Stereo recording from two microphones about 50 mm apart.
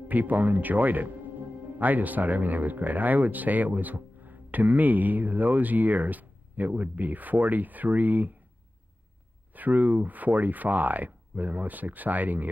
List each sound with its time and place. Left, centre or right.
0.1 s speech: right
9.5 s speech: right